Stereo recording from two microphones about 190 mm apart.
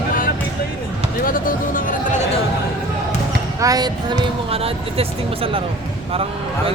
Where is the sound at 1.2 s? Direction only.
45° left (ahead or behind).